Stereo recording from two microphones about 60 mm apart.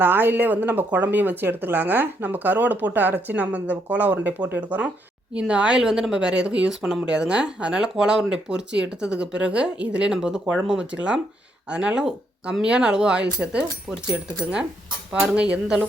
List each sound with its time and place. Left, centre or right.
0.0 s speech: right; by 6.7 s centre
6.7 s speech: centre
7.1 s speech: centre
15.3 s speech: centre